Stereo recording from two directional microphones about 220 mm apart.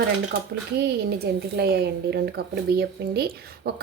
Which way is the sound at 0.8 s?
45° right (ahead or behind).